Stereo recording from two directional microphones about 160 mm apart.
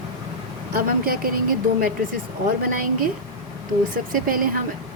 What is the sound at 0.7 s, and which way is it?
Speech, 65° right (ahead or behind).